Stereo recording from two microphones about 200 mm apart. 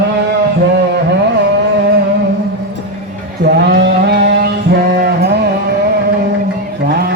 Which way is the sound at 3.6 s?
55° right (ahead or behind).